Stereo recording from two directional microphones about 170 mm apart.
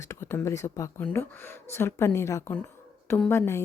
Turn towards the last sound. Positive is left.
turn(degrees=10)  # may be behind; listen again after turning